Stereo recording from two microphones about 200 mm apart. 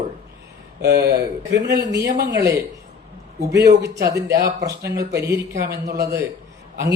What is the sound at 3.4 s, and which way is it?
Speech, 15° right (ahead or behind).